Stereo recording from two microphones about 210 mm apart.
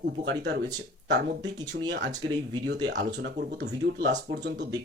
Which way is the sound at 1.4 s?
20° right (ahead or behind).